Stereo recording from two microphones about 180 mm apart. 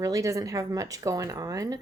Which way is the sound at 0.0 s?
20° right (ahead or behind).